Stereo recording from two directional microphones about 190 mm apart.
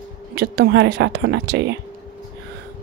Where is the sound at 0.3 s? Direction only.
55° right (ahead or behind).